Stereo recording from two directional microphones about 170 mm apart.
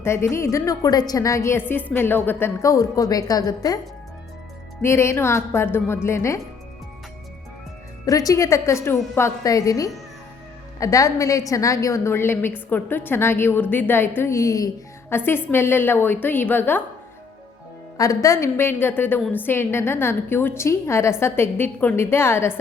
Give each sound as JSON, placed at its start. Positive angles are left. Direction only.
{"t": 0.0, "sound": "a woman's voice", "side_deg": 15}
{"t": 4.8, "sound": "a woman's voice", "side_deg": 15}
{"t": 8.0, "sound": "a woman's voice", "side_deg": 20}
{"t": 17.9, "sound": "a woman's voice", "side_deg": 20}